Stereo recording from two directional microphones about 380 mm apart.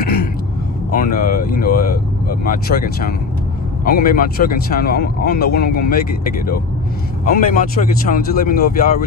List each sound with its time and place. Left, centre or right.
0.0 s gasp: left
0.9 s speech: left
7.2 s speech: left